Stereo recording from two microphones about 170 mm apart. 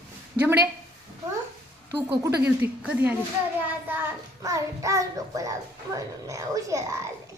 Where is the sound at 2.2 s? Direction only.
15° right (ahead or behind).